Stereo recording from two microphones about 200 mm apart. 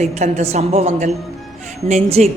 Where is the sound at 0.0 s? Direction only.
35° right (ahead or behind).